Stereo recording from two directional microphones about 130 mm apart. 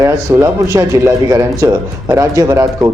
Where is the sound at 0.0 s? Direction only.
25° right (ahead or behind).